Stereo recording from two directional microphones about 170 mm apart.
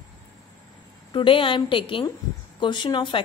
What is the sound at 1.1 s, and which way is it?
A woman's voice, 30° left (ahead or behind).